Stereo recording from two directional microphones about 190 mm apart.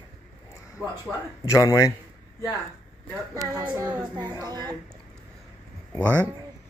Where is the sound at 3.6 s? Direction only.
20° right (ahead or behind).